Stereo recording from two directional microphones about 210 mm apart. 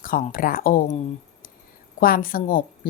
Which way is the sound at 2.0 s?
45° left (ahead or behind).